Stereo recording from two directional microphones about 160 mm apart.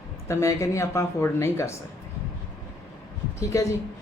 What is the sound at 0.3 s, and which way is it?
Speech, 20° left (ahead or behind).